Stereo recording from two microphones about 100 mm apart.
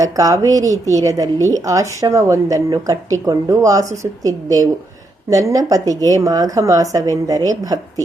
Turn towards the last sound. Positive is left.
turn(degrees=-40)  # may be behind; listen again after turning